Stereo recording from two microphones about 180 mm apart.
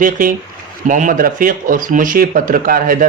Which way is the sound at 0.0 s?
50° right (ahead or behind).